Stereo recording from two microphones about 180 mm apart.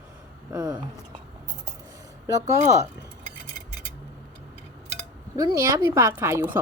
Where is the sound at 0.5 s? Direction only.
20° right (ahead or behind).